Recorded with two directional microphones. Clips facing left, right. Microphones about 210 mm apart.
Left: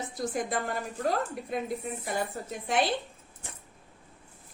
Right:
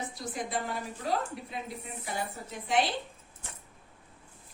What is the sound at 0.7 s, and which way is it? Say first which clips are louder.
Speech: left 3 dB; 50° left (ahead or behind).